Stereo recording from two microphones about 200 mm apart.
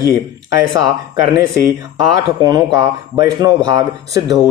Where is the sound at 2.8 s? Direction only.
15° right (ahead or behind).